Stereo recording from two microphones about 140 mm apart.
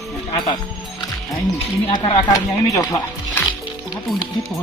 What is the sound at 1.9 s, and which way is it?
Speech, 25° left (ahead or behind).